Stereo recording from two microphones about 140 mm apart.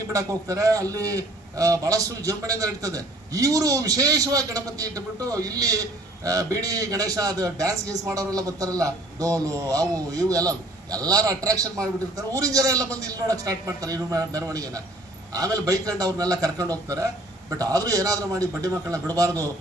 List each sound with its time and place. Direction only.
0.1 s a man's voice: 25° right (ahead or behind)